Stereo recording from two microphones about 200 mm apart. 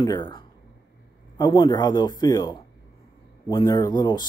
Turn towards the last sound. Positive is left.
turn(degrees=20)  # may be behind; listen again after turning